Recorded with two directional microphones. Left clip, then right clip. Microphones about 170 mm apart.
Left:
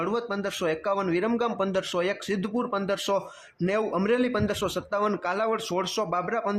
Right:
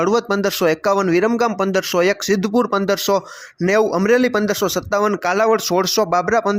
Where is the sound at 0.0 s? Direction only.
40° right (ahead or behind).